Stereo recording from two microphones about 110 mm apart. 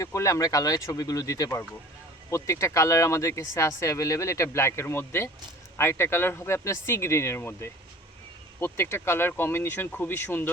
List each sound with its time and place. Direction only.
0.0 s speech: 30° left (ahead or behind)